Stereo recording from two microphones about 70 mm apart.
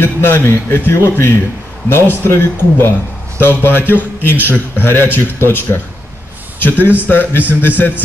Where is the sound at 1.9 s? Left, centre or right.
Left.